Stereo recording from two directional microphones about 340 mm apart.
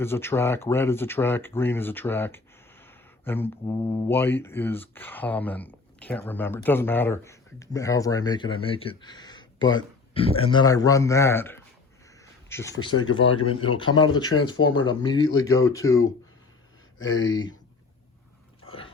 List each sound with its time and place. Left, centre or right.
0.0 s speech: centre
12.0 s a sound: centre
12.9 s speech: left
13.6 s speech: centre